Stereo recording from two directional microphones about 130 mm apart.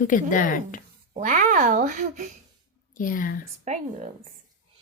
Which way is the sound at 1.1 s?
80° right.